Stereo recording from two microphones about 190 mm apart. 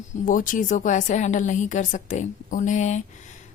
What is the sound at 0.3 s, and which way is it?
A woman's voice, 45° left (ahead or behind).